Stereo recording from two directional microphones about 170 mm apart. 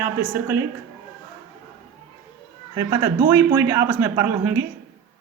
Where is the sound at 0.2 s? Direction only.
15° right (ahead or behind).